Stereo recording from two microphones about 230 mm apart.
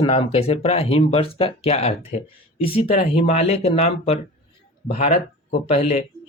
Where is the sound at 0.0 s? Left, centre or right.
Left.